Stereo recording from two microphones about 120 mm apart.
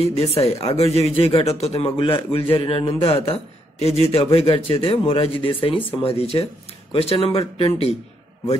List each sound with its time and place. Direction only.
0.0 s speech: 60° left (ahead or behind)